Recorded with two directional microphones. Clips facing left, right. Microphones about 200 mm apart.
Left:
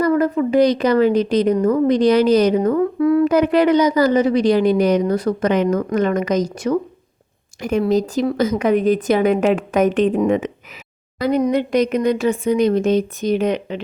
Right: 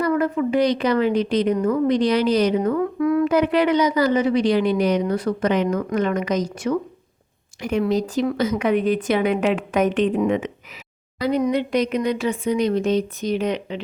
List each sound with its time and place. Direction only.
0.0 s a woman's voice: 40° left (ahead or behind)
3.3 s a woman's voice: 40° left (ahead or behind)